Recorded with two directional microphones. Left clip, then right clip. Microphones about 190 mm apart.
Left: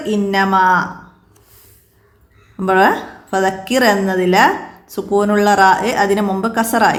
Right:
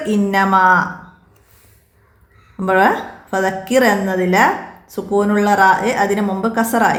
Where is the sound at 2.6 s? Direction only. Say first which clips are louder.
Left 1 dB; 15° left (ahead or behind).